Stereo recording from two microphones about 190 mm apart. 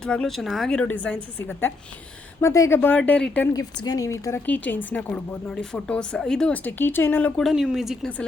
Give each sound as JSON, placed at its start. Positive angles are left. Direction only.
{"t": 0.0, "sound": "a woman's voice", "side_deg": 5}
{"t": 3.5, "sound": "speech", "side_deg": 20}